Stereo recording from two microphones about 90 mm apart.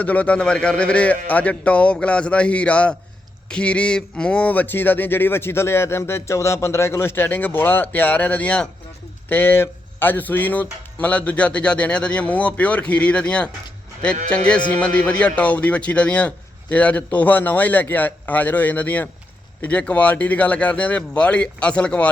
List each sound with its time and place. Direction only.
0.0 s speech: 15° left (ahead or behind)